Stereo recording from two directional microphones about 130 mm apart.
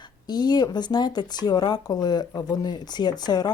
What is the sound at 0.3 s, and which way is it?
Speech, 30° left (ahead or behind).